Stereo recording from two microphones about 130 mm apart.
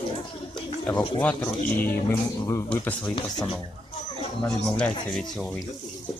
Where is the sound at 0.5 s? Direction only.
10° left (ahead or behind).